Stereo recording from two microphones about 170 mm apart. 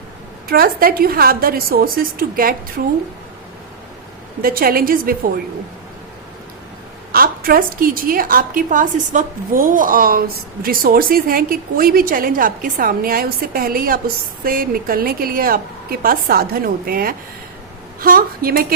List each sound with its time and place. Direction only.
0.4 s a woman's voice: 60° right (ahead or behind)
4.4 s a woman's voice: 60° right (ahead or behind)
7.1 s a woman's voice: 60° right (ahead or behind)